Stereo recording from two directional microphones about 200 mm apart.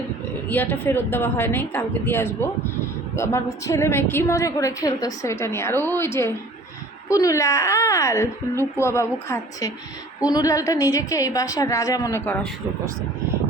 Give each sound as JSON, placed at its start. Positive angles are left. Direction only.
{"t": 0.4, "sound": "a woman's voice", "side_deg": 10}